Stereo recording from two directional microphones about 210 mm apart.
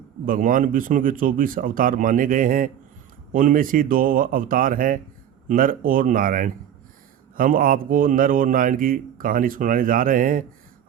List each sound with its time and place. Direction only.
0.3 s a man's voice: 40° right (ahead or behind)